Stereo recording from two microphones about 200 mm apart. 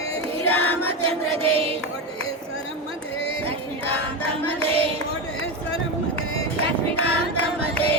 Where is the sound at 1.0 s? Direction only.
30° right (ahead or behind).